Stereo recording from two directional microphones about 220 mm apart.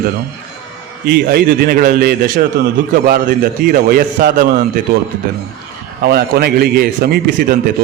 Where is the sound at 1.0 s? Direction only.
45° right (ahead or behind).